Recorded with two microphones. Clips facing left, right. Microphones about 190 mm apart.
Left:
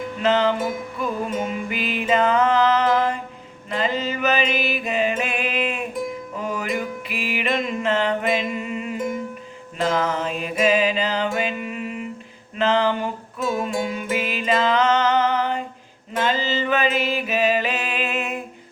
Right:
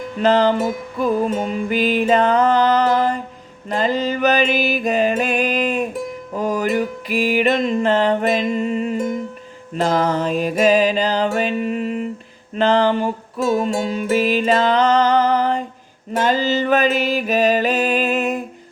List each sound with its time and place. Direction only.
0.2 s mantra: 35° right (ahead or behind)
9.7 s music: 35° right (ahead or behind)
12.5 s a sound: 35° right (ahead or behind)
13.3 s music: 30° right (ahead or behind)